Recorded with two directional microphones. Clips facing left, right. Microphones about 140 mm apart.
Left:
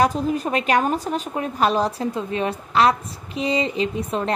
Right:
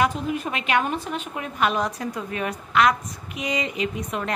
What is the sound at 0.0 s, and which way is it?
A woman's voice, 35° left (ahead or behind).